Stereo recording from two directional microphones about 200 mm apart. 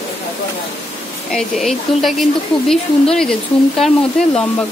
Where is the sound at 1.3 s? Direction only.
Centre (ahead or behind).